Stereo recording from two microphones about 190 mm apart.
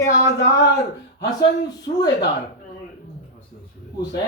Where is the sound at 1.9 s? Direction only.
35° left (ahead or behind).